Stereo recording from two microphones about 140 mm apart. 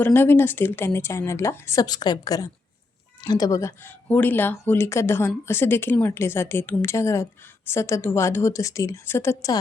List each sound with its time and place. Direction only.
0.0 s a woman's voice: 15° left (ahead or behind)